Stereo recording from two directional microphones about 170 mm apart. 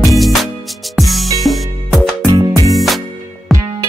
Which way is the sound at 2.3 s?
25° right (ahead or behind).